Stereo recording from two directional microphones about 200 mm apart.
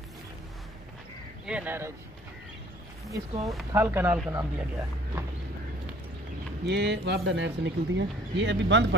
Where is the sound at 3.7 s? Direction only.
10° right (ahead or behind).